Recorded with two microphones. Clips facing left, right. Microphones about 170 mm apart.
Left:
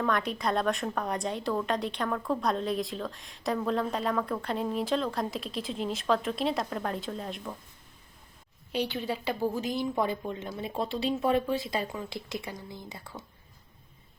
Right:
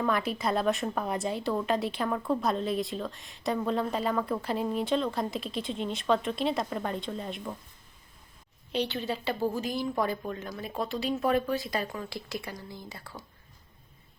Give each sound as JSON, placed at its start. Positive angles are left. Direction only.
{"t": 0.0, "sound": "a woman's voice", "side_deg": -5}
{"t": 8.7, "sound": "a woman's voice", "side_deg": 10}